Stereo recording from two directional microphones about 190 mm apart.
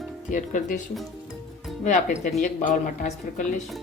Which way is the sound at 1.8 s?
40° left (ahead or behind).